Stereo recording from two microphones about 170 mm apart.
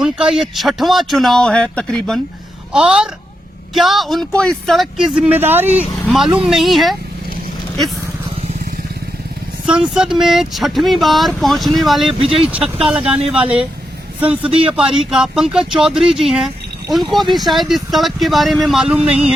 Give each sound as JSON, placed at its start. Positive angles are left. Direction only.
{"t": 0.0, "sound": "speech", "side_deg": -5}
{"t": 9.6, "sound": "speech", "side_deg": -5}
{"t": 14.4, "sound": "speech", "side_deg": -35}
{"t": 14.7, "sound": "speech", "side_deg": -5}